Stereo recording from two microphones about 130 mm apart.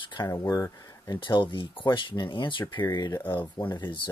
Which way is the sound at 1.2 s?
40° left (ahead or behind).